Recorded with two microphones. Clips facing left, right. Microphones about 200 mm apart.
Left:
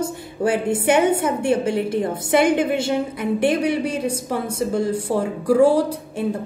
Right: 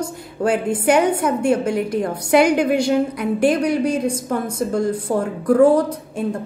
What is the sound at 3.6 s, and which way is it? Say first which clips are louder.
A woman's voice: right 3 dB; 5° left (ahead or behind).